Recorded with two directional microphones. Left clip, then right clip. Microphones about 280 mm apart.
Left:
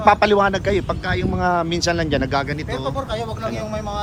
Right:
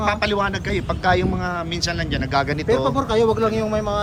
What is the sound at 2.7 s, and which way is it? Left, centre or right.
A man's voice, right.